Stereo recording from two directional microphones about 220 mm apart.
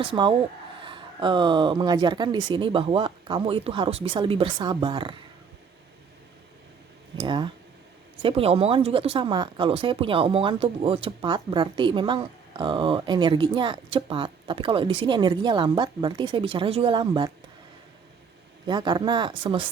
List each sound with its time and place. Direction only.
0.0 s speech: 25° right (ahead or behind)
7.2 s speech: 20° right (ahead or behind)
18.6 s speech: 20° right (ahead or behind)